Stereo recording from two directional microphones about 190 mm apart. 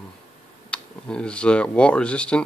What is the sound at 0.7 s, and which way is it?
Speech, 5° left (ahead or behind).